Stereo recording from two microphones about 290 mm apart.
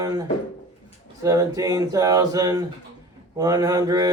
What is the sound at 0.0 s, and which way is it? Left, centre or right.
Speech, centre.